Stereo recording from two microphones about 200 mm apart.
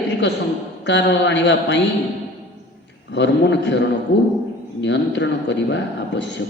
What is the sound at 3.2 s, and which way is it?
Speech, 60° left (ahead or behind).